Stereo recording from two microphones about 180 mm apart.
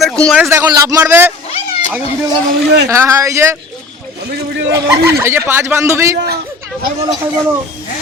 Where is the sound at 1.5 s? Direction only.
35° left (ahead or behind).